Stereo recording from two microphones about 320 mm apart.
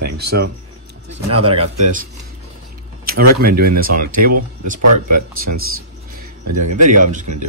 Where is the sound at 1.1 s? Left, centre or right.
Right.